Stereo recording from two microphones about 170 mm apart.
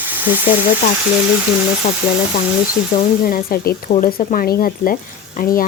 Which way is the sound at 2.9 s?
55° left (ahead or behind).